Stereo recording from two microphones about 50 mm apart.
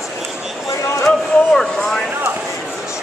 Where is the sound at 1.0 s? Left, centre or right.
Centre.